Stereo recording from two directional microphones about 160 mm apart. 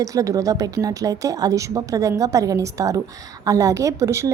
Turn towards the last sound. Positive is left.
turn(degrees=-20)  # may be behind; listen again after turning